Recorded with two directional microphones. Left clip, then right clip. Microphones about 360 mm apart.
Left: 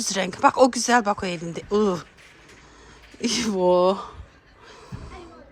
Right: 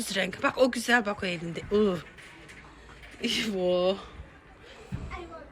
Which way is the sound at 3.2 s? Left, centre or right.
Centre.